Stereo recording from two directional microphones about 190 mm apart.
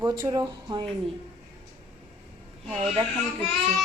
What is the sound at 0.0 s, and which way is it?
Speech, 20° right (ahead or behind).